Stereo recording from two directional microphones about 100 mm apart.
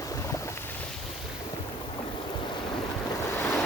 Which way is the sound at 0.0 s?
35° left (ahead or behind).